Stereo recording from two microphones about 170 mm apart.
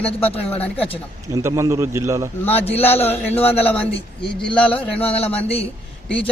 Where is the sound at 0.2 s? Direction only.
35° left (ahead or behind).